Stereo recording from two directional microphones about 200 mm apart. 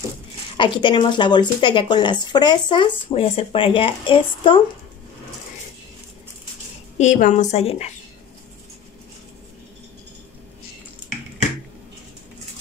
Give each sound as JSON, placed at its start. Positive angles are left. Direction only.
{"t": 0.6, "sound": "speech", "side_deg": 25}
{"t": 7.0, "sound": "a woman's voice", "side_deg": 40}